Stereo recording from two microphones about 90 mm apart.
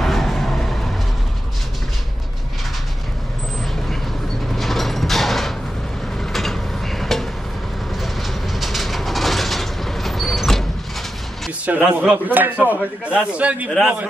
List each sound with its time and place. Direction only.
0.0 s vehicle: centre (ahead or behind)
4.6 s a sound: centre (ahead or behind)
6.3 s vehicle: 5° left (ahead or behind)
8.0 s train: centre (ahead or behind)
11.6 s a man's voice: 15° right (ahead or behind)